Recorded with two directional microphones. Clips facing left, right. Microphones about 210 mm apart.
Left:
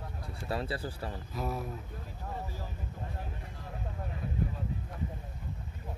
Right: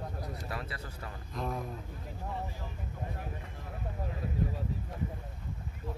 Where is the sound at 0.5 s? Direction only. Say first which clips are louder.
Left 6 dB; 30° left (ahead or behind).